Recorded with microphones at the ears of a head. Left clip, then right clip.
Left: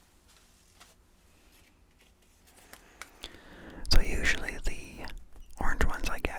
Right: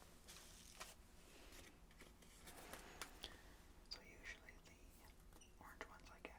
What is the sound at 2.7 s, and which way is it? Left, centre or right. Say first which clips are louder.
Whispering: left 9 dB; left.